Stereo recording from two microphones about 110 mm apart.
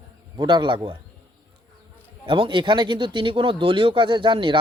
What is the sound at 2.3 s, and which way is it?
Speech, 45° right (ahead or behind).